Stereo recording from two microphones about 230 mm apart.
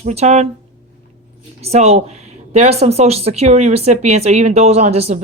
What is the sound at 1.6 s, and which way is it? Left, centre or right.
Speech, right.